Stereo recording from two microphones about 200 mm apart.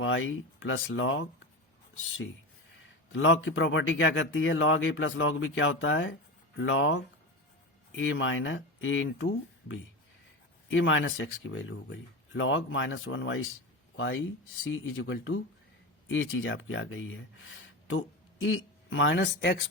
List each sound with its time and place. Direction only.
0.0 s a man's voice: 75° left (ahead or behind)
3.1 s a man's voice: 75° left (ahead or behind)